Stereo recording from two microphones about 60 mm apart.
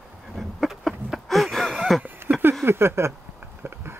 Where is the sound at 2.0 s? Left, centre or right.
Right.